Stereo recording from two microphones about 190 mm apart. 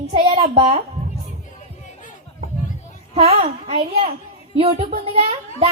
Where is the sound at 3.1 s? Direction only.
30° right (ahead or behind).